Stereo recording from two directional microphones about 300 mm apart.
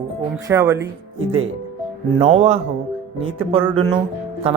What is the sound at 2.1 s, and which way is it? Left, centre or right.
Speech, right.